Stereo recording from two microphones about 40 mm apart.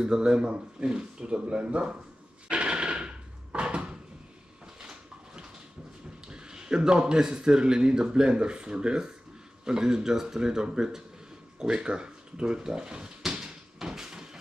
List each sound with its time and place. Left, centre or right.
0.0 s a man's voice: centre
2.5 s a sound: right
6.2 s a man's voice: centre
13.4 s cupboard open or close: centre